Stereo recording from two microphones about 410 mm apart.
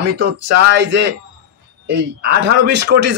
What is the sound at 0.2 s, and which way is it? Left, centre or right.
Speech, right.